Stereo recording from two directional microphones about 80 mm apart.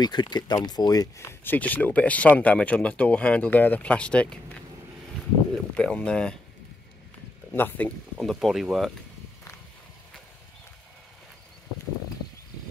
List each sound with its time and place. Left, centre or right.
0.0 s speech: left
1.1 s speech: left; by 4.6 s centre
5.8 s speech: centre
7.5 s speech: left
8.2 s speech: centre